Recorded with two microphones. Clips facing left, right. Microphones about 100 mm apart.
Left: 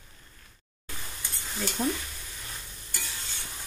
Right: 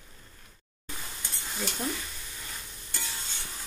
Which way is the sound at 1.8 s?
10° left (ahead or behind).